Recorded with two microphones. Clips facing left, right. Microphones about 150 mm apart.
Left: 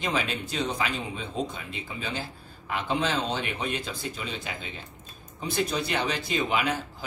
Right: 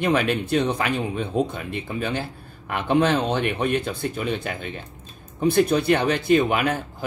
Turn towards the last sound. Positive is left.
turn(degrees=-55)  # may be behind; listen again after turning